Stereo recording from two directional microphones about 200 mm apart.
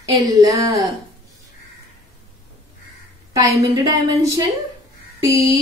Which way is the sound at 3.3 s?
20° right (ahead or behind).